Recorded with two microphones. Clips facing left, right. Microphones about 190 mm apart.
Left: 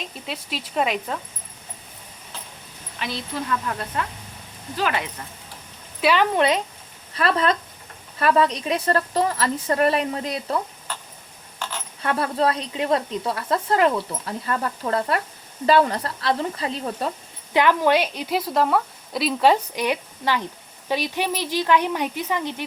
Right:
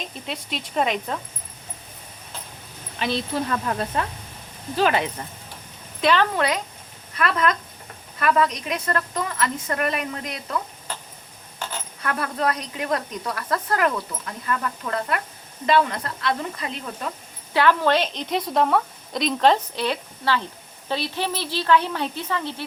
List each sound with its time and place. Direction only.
0.3 s speech: 5° left (ahead or behind)
4.8 s speech: 30° right (ahead or behind)
6.0 s speech: 10° left (ahead or behind)
6.3 s a woman's voice: 25° left (ahead or behind)
12.0 s a woman's voice: 30° left (ahead or behind)
17.5 s a woman's voice: 15° left (ahead or behind)